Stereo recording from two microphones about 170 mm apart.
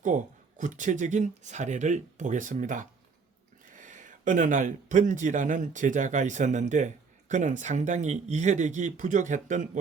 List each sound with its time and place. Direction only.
0.0 s speech: 45° right (ahead or behind)